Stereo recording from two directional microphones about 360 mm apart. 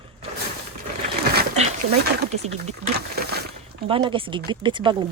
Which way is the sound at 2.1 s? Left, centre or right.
Right.